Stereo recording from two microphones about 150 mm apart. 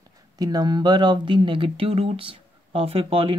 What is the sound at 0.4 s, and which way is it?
Speech, 25° right (ahead or behind).